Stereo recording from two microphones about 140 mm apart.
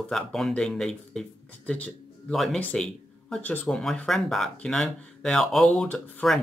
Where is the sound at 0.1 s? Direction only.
5° left (ahead or behind).